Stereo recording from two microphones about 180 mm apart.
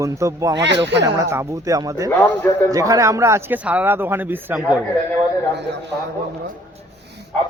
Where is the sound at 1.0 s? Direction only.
20° right (ahead or behind).